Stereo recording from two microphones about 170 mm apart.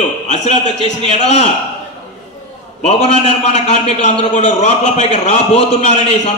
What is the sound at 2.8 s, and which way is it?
A man's voice, 40° left (ahead or behind).